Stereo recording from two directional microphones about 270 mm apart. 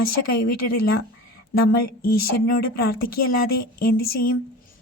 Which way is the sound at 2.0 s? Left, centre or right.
Left.